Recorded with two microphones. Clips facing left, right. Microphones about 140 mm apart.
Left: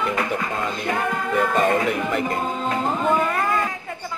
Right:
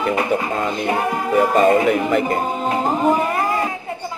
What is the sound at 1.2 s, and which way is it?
Music, 35° right (ahead or behind).